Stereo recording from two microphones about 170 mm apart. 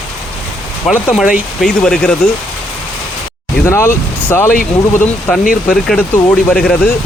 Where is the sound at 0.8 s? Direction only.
Centre (ahead or behind).